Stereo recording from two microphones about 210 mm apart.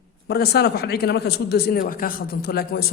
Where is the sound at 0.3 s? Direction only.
50° left (ahead or behind).